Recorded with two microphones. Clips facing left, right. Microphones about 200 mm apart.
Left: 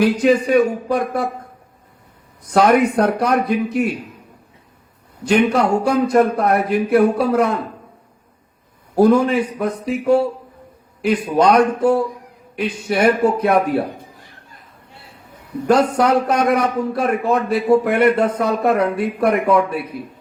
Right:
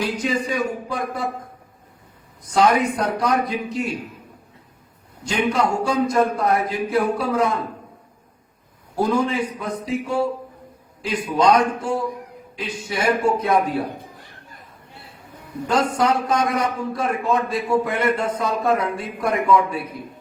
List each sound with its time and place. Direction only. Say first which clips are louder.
0.0 s a man's voice: left 9 dB; 60° left (ahead or behind)
2.5 s a man's voice: left 4 dB; 60° left (ahead or behind)
5.2 s a man's voice: left 6 dB; 60° left (ahead or behind)
9.0 s a man's voice: left 7 dB; 60° left (ahead or behind)
15.6 s a man's voice: left 5 dB; 60° left (ahead or behind)